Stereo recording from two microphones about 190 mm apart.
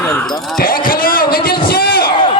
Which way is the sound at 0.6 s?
50° left (ahead or behind).